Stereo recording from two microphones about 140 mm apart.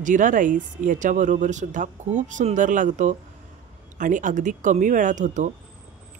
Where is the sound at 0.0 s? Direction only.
65° right (ahead or behind).